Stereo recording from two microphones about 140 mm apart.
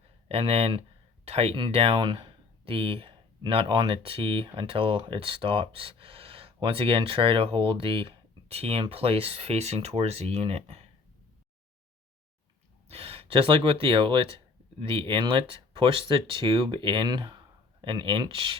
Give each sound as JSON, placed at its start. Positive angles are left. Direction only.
{"t": 0.3, "sound": "speech", "side_deg": -45}
{"t": 12.9, "sound": "speech", "side_deg": -45}